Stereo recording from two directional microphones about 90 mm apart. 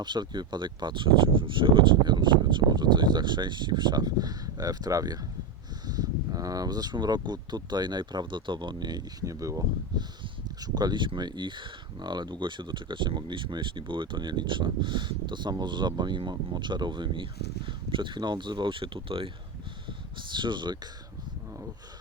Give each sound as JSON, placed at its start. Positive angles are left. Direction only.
{"t": 0.0, "sound": "speech", "side_deg": -55}
{"t": 10.6, "sound": "speech", "side_deg": -50}
{"t": 20.3, "sound": "speech", "side_deg": -60}